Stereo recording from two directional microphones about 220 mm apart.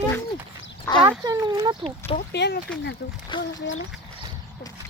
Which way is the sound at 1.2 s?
15° right (ahead or behind).